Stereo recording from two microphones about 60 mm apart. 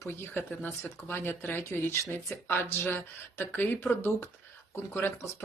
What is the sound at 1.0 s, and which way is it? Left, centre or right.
Speech, left.